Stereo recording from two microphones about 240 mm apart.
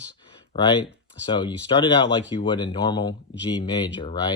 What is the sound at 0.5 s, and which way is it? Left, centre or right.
Speech, centre.